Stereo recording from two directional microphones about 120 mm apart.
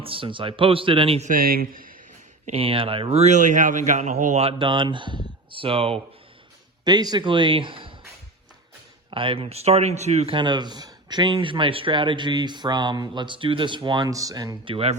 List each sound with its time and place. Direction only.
0.0 s speech: 50° right (ahead or behind)
2.5 s a man's voice: 50° right (ahead or behind); by 4.4 s 80° right
4.4 s speech: 45° right (ahead or behind)
6.8 s speech: 35° right (ahead or behind)
9.0 s speech: 45° right (ahead or behind); by 10.3 s 65° right (ahead or behind)
10.3 s speech: 40° right (ahead or behind)
14.6 s speech: 45° right (ahead or behind)